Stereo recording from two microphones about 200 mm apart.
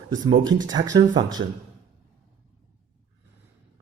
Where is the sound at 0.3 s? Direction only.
20° right (ahead or behind).